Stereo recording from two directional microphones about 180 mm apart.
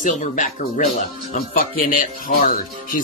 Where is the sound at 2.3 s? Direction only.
50° left (ahead or behind).